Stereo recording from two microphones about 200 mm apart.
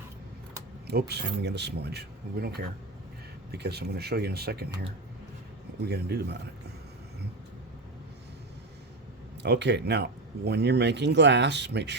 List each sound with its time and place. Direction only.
0.9 s speech: 55° right (ahead or behind)
9.4 s speech: 60° right (ahead or behind)